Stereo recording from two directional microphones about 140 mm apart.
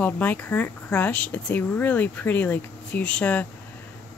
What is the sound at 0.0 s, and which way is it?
Speech, 10° left (ahead or behind).